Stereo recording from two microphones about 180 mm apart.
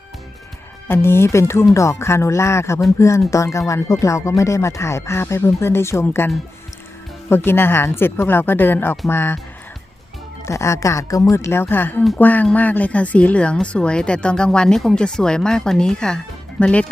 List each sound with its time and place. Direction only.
0.9 s speech: 15° left (ahead or behind)
10.4 s speech: 15° left (ahead or behind)